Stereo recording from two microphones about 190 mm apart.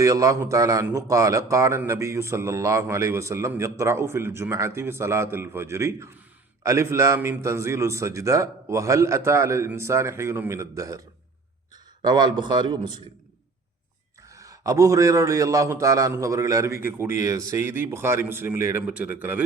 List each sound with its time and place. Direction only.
0.0 s a man's voice: 15° right (ahead or behind)
12.0 s speech: 20° right (ahead or behind)
14.3 s a man's voice: 15° right (ahead or behind)